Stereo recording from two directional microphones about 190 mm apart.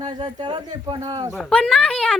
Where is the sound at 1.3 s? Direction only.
5° left (ahead or behind).